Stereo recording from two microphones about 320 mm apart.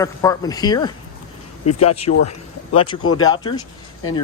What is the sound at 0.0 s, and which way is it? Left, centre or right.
Speech, centre.